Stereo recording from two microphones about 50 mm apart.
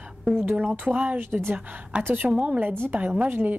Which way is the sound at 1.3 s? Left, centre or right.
Right.